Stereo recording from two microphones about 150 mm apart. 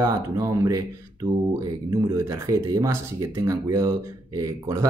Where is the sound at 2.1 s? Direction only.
20° right (ahead or behind).